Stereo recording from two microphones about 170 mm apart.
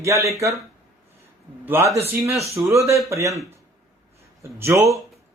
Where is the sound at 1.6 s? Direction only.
15° right (ahead or behind).